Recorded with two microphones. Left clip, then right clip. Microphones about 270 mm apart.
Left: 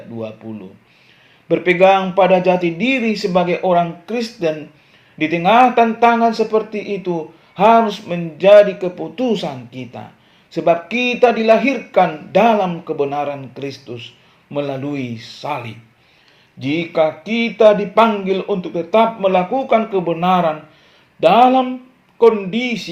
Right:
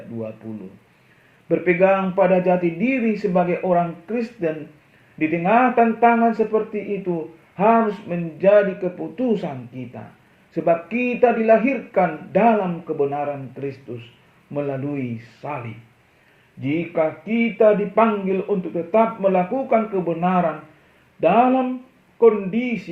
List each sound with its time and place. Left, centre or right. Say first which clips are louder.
1.5 s speech: left 5 dB; left
16.6 s speech: left 5 dB; left